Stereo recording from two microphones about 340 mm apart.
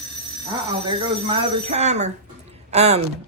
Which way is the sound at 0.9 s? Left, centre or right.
Centre.